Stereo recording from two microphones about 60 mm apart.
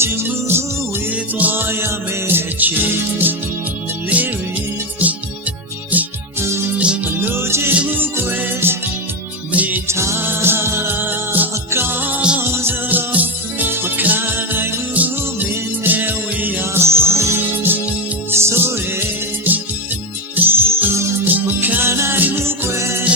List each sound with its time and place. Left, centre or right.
0.0 s music: right
1.1 s music: right
6.7 s music: centre
7.2 s music: right
7.7 s music: right
9.5 s music: right
9.8 s music: right
10.2 s music: right
14.9 s music: right
17.6 s music: right
21.8 s music: right
22.2 s music: right
22.4 s music: right